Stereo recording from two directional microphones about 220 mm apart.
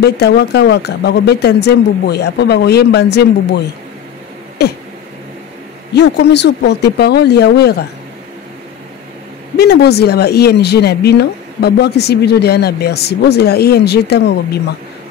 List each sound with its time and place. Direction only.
0.0 s speech: 50° left (ahead or behind)
5.9 s speech: 50° left (ahead or behind)
9.6 s speech: 50° left (ahead or behind)